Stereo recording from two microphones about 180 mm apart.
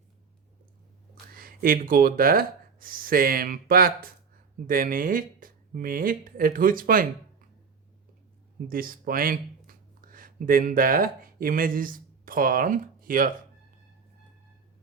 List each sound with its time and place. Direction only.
1.3 s speech: 55° right (ahead or behind)
8.6 s speech: 55° right (ahead or behind)